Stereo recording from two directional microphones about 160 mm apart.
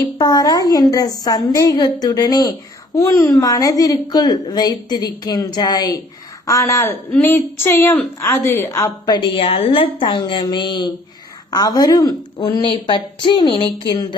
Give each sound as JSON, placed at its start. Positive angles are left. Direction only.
{"t": 0.2, "sound": "a child's voice", "side_deg": 25}